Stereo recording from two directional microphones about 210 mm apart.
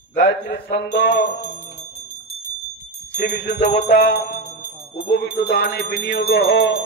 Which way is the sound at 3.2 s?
40° left (ahead or behind).